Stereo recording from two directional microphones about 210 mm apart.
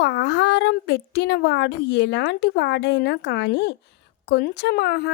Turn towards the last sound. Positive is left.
turn(degrees=55)  # may be behind; listen again after turning